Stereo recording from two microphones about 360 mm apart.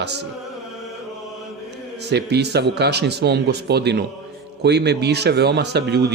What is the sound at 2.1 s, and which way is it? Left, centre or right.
Speech, right.